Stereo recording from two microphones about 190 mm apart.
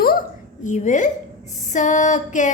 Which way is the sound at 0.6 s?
40° left (ahead or behind).